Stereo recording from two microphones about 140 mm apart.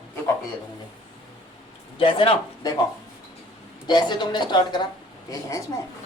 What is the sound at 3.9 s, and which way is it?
Speech, 30° left (ahead or behind).